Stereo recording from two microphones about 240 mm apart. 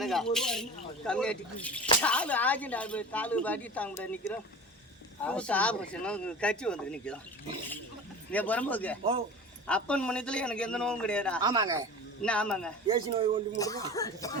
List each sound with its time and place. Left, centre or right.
0.0 s speech: centre
5.2 s speech: centre
8.3 s speech: centre
11.4 s speech: centre
12.2 s speech: centre
12.9 s a man's voice: right
13.6 s speech: centre